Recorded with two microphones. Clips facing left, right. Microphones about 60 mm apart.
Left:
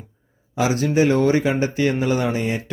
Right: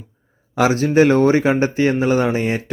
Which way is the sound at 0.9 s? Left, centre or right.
Right.